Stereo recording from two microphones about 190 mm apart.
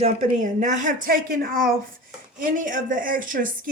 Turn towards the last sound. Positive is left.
turn(degrees=-45)  # may be behind; listen again after turning